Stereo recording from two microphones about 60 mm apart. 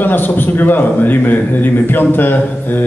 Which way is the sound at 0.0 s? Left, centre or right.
Left.